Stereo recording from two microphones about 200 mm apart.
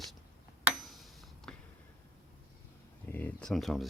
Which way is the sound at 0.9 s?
Centre (ahead or behind).